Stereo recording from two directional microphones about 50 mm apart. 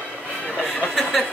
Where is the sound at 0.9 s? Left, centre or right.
Centre.